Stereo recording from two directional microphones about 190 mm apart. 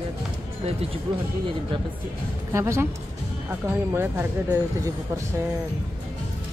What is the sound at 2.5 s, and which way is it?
Speech, 15° right (ahead or behind).